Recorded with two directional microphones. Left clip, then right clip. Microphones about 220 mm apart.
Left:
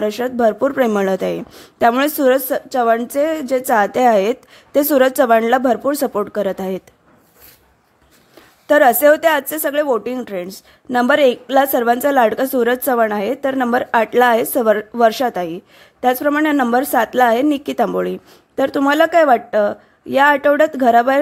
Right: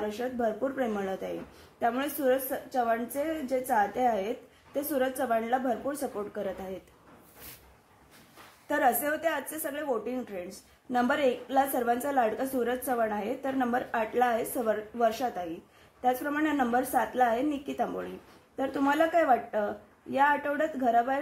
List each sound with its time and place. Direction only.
0.0 s a woman's voice: 50° left (ahead or behind)
8.6 s a woman's voice: 40° left (ahead or behind)